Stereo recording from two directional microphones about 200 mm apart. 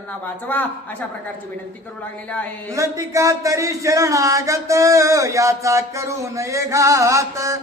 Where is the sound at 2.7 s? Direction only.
15° right (ahead or behind).